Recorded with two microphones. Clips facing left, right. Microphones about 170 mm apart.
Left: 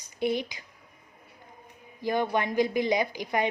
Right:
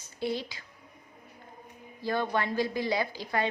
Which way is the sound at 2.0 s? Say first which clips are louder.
Left 3 dB; 15° left (ahead or behind).